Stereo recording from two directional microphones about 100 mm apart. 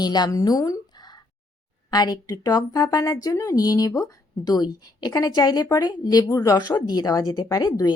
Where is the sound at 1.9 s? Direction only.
40° left (ahead or behind).